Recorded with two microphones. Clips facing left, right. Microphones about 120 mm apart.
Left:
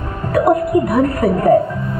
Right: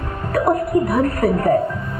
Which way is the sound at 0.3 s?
15° left (ahead or behind).